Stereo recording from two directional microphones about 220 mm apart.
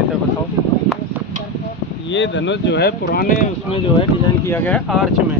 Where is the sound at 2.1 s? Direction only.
55° left (ahead or behind); by 3.5 s 40° left (ahead or behind).